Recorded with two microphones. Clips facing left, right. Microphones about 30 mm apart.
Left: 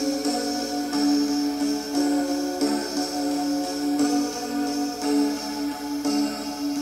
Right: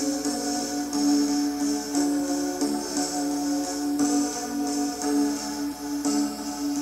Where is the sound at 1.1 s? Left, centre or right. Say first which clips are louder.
Left 1 dB; left.